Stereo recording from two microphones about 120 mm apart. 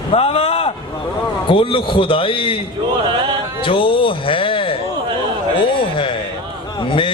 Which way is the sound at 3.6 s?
45° left (ahead or behind).